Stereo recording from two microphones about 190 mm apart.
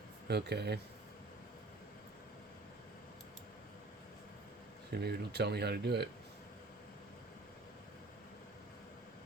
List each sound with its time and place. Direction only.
0.3 s speech: 60° right (ahead or behind)
4.9 s speech: 55° right (ahead or behind)